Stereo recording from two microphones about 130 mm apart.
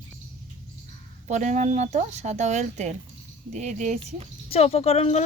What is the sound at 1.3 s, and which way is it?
Speech, 70° right (ahead or behind).